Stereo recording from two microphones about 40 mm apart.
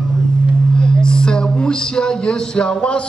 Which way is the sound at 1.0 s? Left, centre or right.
Left.